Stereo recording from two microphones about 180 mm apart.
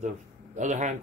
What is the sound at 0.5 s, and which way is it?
Speech, 45° right (ahead or behind).